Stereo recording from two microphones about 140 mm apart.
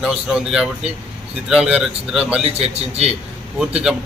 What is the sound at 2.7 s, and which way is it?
Speech, 50° right (ahead or behind).